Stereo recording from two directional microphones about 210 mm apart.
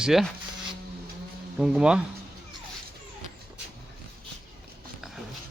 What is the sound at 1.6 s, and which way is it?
Speech, 5° right (ahead or behind).